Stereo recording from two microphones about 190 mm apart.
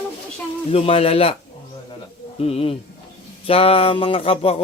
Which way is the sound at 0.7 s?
30° left (ahead or behind).